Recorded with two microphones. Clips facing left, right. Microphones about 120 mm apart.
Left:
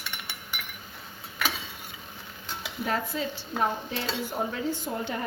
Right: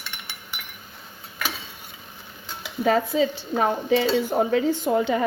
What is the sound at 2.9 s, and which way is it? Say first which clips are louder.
Speech: right 10 dB; 90° right.